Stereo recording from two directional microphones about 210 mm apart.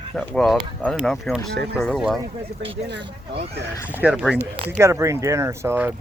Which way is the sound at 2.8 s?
55° right (ahead or behind).